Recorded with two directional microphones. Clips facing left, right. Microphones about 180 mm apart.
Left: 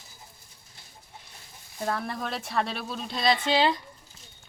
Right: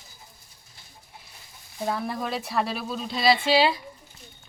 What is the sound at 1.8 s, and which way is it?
Speech, 5° right (ahead or behind).